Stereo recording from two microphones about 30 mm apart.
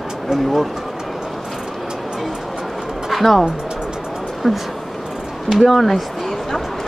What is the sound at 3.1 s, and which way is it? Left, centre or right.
Speech, centre.